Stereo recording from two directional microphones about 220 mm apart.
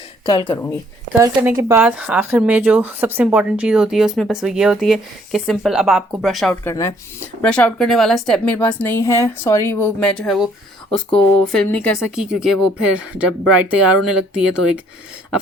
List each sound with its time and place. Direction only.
0.3 s speech: 20° left (ahead or behind)
1.2 s speech: 15° right (ahead or behind)
6.7 s a woman's voice: 10° left (ahead or behind); by 14.6 s 5° right (ahead or behind)